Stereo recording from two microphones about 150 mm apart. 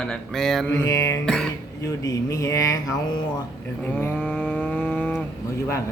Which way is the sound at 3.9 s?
10° left (ahead or behind).